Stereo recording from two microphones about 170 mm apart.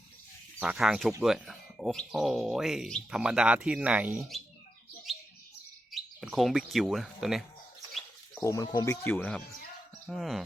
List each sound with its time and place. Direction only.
0.6 s speech: 5° right (ahead or behind)
5.9 s speech: centre (ahead or behind)
8.4 s speech: 20° left (ahead or behind); by 10.4 s centre (ahead or behind)